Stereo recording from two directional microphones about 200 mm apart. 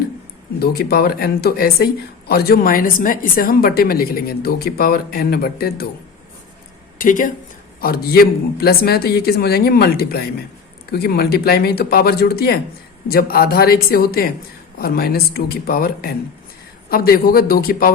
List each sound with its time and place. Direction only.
0.6 s speech: 50° left (ahead or behind)
7.0 s speech: 40° left (ahead or behind)